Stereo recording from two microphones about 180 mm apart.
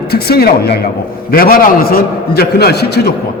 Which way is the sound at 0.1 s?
60° left (ahead or behind).